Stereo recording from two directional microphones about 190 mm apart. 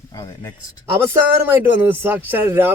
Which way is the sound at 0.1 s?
20° left (ahead or behind).